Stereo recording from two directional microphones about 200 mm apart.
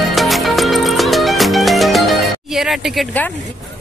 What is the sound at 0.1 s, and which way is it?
Music, centre (ahead or behind).